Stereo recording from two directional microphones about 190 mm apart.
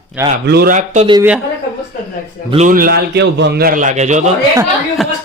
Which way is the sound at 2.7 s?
50° right (ahead or behind).